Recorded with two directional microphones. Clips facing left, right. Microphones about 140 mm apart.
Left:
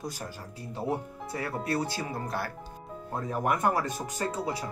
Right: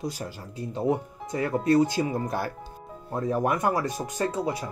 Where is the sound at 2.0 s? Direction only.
25° right (ahead or behind).